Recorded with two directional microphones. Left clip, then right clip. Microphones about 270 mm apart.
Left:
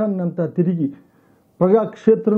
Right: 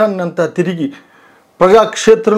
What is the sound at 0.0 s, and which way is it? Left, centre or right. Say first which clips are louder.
Speech: right 9 dB; centre.